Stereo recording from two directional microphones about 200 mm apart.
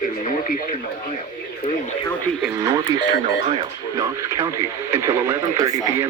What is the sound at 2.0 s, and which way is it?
Speech, 10° left (ahead or behind).